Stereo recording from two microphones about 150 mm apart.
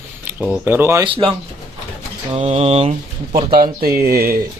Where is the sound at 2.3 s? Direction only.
40° right (ahead or behind).